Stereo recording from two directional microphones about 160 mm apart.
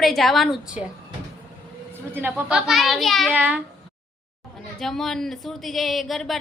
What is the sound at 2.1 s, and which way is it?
A woman's voice, 15° right (ahead or behind).